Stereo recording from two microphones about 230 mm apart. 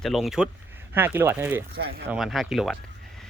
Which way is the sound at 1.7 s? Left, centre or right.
Right.